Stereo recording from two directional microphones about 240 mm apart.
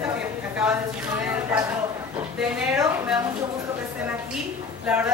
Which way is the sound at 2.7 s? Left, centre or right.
Centre.